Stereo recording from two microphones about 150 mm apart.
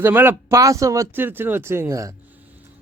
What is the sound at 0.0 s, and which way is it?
Speech, 15° right (ahead or behind).